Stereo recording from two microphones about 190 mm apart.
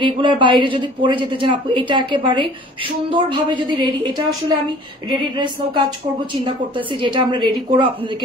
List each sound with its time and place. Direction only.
0.0 s a woman's voice: 25° right (ahead or behind)
7.0 s a woman's voice: 25° right (ahead or behind)